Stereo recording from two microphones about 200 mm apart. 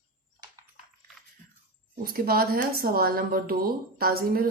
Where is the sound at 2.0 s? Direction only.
45° right (ahead or behind).